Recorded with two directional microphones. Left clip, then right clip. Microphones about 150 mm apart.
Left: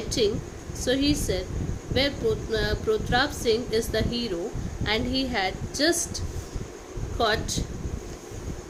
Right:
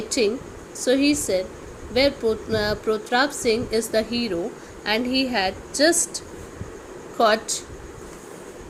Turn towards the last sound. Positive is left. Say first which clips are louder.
# right 6 dB
turn(degrees=-30)  # may be behind; listen again after turning